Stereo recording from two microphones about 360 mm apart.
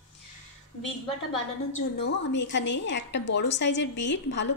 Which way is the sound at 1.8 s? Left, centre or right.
Left.